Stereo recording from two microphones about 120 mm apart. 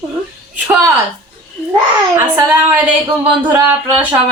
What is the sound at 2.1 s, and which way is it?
Speech, 15° right (ahead or behind).